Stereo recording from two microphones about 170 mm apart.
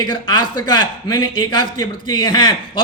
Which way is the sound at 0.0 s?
25° left (ahead or behind).